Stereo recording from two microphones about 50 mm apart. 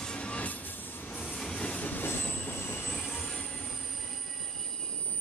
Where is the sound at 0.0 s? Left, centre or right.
Left.